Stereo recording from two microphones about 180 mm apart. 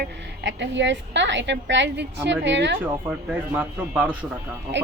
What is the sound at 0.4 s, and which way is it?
A woman's voice, 80° right.